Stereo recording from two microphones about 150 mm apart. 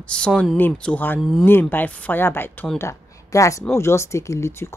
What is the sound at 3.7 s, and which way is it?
Speech, 20° left (ahead or behind).